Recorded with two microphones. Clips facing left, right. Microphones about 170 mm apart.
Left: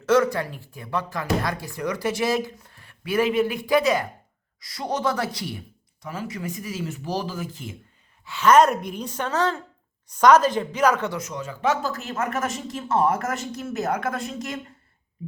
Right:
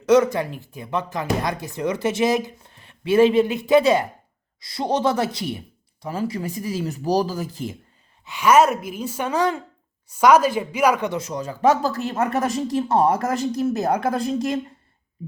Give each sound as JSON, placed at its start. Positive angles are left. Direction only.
{"t": 0.0, "sound": "speech", "side_deg": -20}
{"t": 8.2, "sound": "a woman's voice", "side_deg": -15}
{"t": 11.2, "sound": "speech", "side_deg": -35}